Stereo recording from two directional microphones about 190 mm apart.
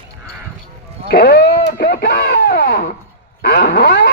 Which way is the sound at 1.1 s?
55° left (ahead or behind).